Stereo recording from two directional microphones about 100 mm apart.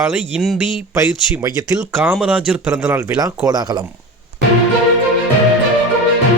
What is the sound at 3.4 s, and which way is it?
Speech, 45° right (ahead or behind).